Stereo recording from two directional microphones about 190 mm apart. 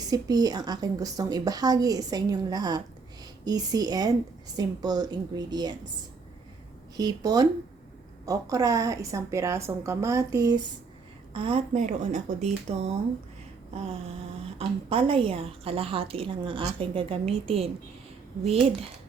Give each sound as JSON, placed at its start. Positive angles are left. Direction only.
{"t": 0.1, "sound": "a woman's voice", "side_deg": -20}
{"t": 6.9, "sound": "a woman's voice", "side_deg": -20}
{"t": 11.3, "sound": "speech", "side_deg": -30}
{"t": 14.8, "sound": "a woman's voice", "side_deg": -30}